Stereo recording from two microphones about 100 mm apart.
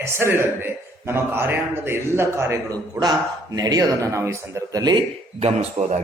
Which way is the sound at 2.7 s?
40° right (ahead or behind).